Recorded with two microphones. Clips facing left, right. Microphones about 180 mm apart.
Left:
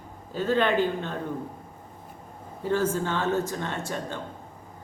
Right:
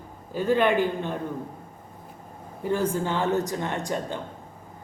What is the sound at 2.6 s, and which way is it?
A man's voice, 15° right (ahead or behind).